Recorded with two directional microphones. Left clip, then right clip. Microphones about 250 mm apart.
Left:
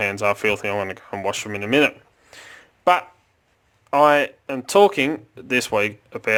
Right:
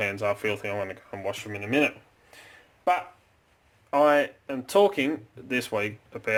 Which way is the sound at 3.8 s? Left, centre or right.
Left.